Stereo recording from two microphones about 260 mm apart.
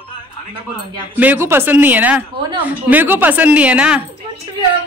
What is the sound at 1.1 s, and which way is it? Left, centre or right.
A woman's voice, centre.